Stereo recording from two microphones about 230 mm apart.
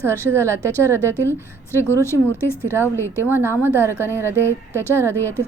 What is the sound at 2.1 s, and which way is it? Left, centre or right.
Speech, centre.